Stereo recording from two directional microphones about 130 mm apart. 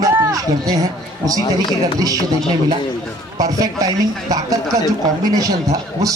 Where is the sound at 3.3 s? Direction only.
30° right (ahead or behind).